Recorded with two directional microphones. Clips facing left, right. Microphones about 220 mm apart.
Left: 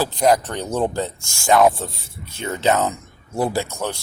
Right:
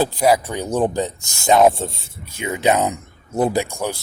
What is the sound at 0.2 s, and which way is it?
Speech, 10° right (ahead or behind).